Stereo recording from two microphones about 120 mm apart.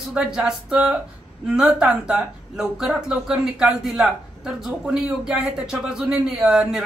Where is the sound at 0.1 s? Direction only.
5° right (ahead or behind).